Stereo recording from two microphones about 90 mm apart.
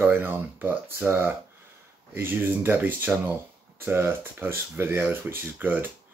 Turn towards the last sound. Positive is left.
turn(degrees=-20)  # may be behind; listen again after turning